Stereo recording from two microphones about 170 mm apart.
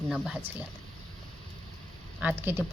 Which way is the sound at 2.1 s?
10° right (ahead or behind).